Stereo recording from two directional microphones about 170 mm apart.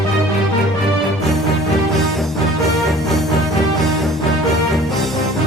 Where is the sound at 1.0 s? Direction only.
Centre (ahead or behind).